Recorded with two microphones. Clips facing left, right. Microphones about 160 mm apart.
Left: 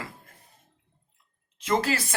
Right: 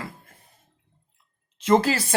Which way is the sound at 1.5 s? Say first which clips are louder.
Right 6 dB; 30° right (ahead or behind).